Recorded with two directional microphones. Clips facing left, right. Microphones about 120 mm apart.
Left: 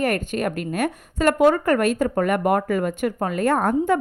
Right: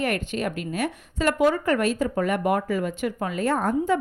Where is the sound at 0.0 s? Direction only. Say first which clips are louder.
Left 3 dB; 45° left (ahead or behind).